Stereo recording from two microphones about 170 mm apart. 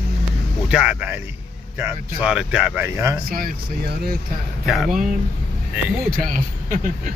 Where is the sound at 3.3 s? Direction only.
60° right (ahead or behind).